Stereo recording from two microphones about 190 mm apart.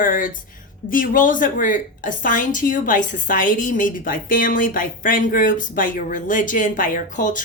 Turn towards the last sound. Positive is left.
turn(degrees=45)  # may be behind; listen again after turning